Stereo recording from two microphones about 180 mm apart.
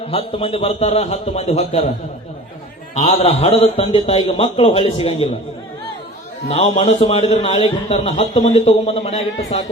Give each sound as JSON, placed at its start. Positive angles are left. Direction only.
{"t": 0.1, "sound": "a man's voice", "side_deg": 30}
{"t": 2.9, "sound": "a man's voice", "side_deg": 35}
{"t": 6.5, "sound": "a man's voice", "side_deg": 35}